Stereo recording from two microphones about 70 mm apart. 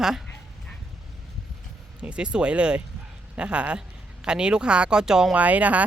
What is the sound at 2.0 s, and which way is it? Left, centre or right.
Speech, centre.